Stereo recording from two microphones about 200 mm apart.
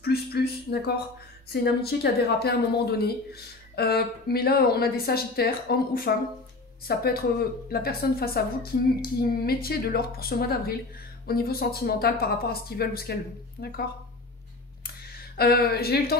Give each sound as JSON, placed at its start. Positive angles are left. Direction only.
{"t": 0.0, "sound": "a woman's voice", "side_deg": 50}
{"t": 15.3, "sound": "a woman's voice", "side_deg": 50}